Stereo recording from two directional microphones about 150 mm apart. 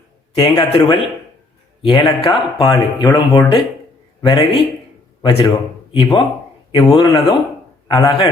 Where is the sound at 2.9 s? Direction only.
30° left (ahead or behind).